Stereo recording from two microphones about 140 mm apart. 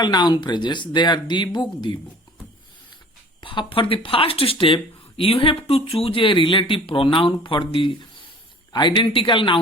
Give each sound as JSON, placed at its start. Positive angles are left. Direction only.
{"t": 0.0, "sound": "speech", "side_deg": 30}
{"t": 3.4, "sound": "speech", "side_deg": 35}